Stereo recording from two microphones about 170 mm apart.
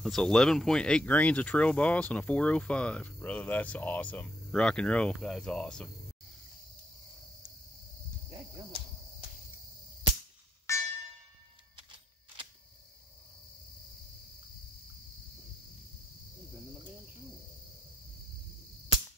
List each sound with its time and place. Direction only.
0.0 s speech: 5° left (ahead or behind)
8.3 s arrow: 30° right (ahead or behind)
10.7 s music: 15° left (ahead or behind)